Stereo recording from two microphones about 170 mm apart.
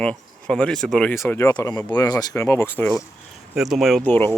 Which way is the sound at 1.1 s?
15° left (ahead or behind).